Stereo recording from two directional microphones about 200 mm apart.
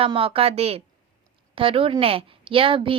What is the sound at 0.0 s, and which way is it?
A woman's voice, 25° right (ahead or behind).